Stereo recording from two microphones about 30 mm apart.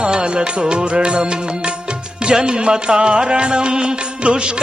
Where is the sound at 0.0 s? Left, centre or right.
Right.